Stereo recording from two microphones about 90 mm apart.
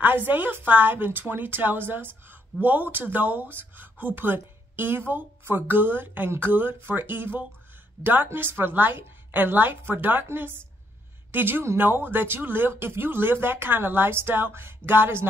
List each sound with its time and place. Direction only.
0.0 s a woman's voice: 20° right (ahead or behind)